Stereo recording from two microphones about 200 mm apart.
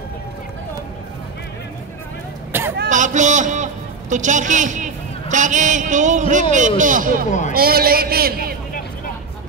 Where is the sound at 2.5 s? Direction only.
10° right (ahead or behind).